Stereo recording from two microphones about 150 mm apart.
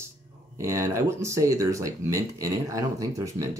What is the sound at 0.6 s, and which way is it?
Speech, 20° right (ahead or behind).